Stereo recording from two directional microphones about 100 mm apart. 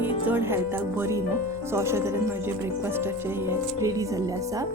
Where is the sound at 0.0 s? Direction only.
20° right (ahead or behind).